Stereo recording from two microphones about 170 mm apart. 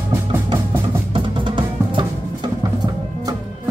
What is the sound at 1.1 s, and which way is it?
Music, 30° right (ahead or behind).